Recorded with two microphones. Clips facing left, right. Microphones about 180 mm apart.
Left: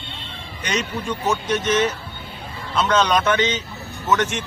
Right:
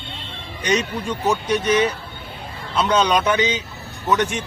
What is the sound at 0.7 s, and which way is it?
Speech, 10° right (ahead or behind).